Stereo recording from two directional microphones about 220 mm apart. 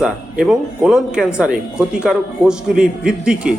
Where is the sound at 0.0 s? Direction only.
5° right (ahead or behind).